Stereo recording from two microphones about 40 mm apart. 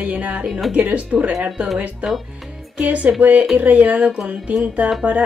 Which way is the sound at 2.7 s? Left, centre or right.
Right.